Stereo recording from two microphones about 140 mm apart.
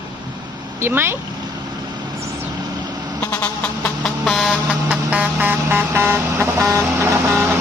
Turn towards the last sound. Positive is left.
turn(degrees=-15)  # may be behind; listen again after turning